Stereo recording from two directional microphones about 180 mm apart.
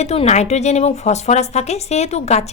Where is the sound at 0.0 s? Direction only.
35° left (ahead or behind).